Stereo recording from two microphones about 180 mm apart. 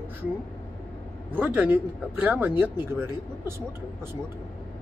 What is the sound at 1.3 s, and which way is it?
Speech, 10° right (ahead or behind).